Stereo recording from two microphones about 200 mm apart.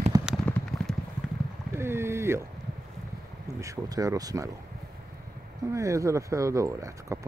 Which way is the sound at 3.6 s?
15° right (ahead or behind).